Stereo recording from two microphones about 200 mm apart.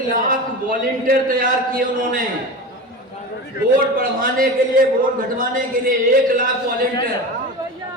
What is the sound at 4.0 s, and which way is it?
A man's voice, 45° right (ahead or behind).